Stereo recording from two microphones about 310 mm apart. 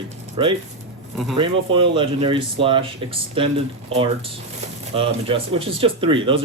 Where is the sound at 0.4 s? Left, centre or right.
Centre.